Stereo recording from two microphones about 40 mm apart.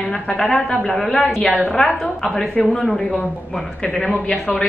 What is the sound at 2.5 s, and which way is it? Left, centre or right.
Speech, left.